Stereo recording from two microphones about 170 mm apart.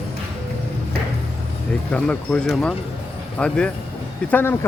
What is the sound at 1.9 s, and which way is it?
Speech, 5° left (ahead or behind).